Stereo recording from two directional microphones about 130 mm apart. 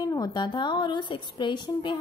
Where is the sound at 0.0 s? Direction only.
30° left (ahead or behind).